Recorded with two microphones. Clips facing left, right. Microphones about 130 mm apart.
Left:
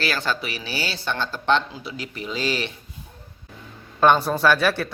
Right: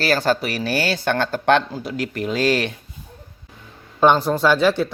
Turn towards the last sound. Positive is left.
turn(degrees=-15)  # may be behind; listen again after turning